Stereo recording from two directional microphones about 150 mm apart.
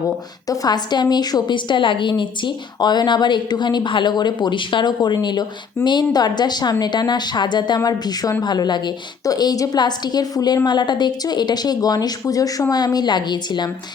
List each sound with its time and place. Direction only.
0.4 s a woman's voice: 25° left (ahead or behind)